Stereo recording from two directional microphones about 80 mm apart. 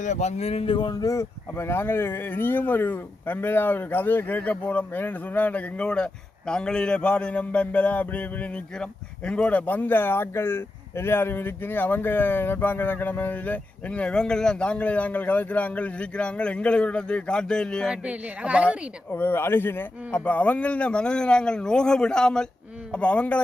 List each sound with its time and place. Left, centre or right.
0.7 s a man's voice: left
0.9 s speech: left; by 17.9 s centre
17.9 s a woman's voice: centre
19.1 s a man's voice: left